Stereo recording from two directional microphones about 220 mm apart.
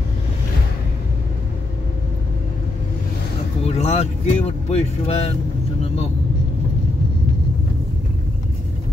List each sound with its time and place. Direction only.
3.6 s speech: 30° left (ahead or behind)